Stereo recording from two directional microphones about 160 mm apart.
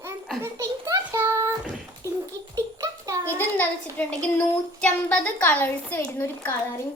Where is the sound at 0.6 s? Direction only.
15° right (ahead or behind).